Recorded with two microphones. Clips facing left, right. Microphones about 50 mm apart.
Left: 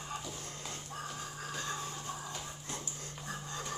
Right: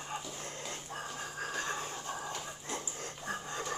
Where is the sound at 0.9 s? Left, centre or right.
Right.